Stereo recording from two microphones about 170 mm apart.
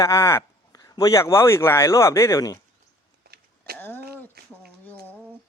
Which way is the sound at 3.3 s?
65° right (ahead or behind).